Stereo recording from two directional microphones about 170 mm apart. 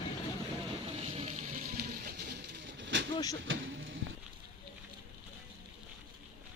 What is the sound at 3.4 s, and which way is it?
Speech, 90° right.